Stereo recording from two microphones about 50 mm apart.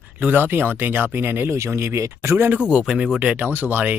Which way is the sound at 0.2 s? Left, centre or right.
Right.